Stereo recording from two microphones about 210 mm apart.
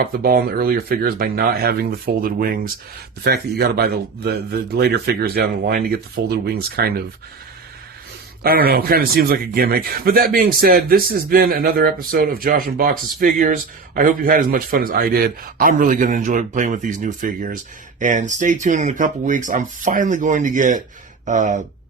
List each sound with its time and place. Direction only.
0.0 s a man's voice: 45° right (ahead or behind)
8.4 s a man's voice: 45° right (ahead or behind)